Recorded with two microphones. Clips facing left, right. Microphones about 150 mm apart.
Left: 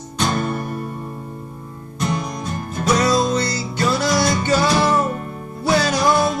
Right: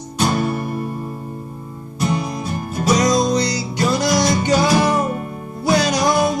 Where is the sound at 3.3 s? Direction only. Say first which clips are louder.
Right 2 dB; 15° right (ahead or behind).